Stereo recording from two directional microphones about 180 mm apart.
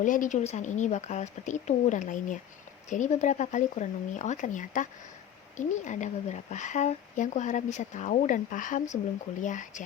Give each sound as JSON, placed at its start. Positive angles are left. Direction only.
{"t": 0.0, "sound": "speech", "side_deg": 45}